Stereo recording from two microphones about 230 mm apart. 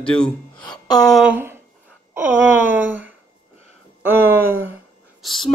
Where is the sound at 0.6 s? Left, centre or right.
Centre.